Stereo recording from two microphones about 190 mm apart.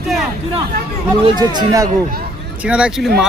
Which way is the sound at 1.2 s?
20° right (ahead or behind).